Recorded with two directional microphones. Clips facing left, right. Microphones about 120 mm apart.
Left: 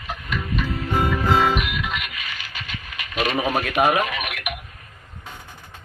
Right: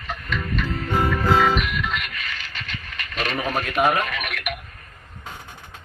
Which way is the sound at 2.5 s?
10° left (ahead or behind).